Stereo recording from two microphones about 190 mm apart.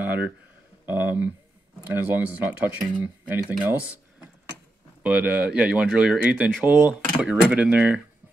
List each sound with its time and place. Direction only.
0.0 s a sound: 10° right (ahead or behind)
0.8 s speech: 10° right (ahead or behind)
5.0 s speech: 5° right (ahead or behind)